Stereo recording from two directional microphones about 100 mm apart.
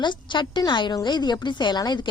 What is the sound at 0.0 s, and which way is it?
Speech, 50° left (ahead or behind).